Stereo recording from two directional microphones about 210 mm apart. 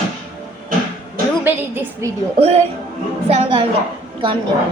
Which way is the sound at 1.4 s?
10° right (ahead or behind).